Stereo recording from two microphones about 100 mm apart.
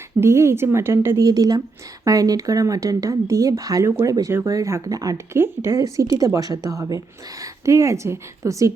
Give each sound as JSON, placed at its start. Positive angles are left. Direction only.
{"t": 0.2, "sound": "speech", "side_deg": -25}
{"t": 1.2, "sound": "speech", "side_deg": -40}